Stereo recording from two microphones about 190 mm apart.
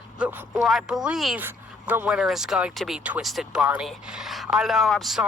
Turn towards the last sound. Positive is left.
turn(degrees=0)  # may be behind; listen again after turning